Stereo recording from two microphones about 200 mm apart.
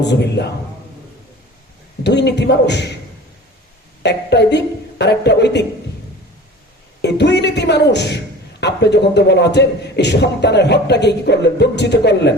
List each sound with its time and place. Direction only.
0.0 s speech: 60° left (ahead or behind)
2.0 s speech: 60° left (ahead or behind)
4.0 s speech: 55° left (ahead or behind)
7.0 s speech: 60° left (ahead or behind)